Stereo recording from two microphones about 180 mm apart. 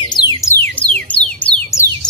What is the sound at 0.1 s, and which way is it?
Music, 25° left (ahead or behind).